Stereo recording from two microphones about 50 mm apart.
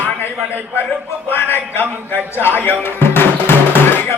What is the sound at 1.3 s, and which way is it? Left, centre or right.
Speech, left.